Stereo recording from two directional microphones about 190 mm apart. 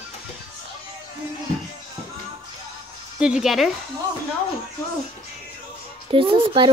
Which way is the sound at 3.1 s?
5° right (ahead or behind).